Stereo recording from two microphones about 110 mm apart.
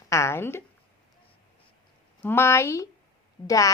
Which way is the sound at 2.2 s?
20° left (ahead or behind).